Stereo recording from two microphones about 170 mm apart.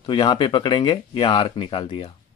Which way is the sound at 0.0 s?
25° left (ahead or behind).